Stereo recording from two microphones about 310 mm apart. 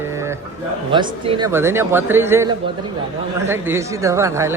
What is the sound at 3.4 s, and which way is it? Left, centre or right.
Speech, centre.